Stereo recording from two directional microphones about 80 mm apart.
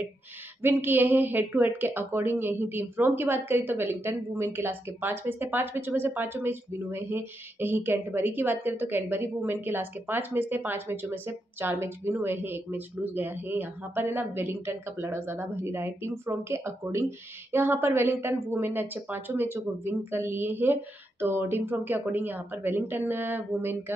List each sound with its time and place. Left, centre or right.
0.6 s a woman's voice: right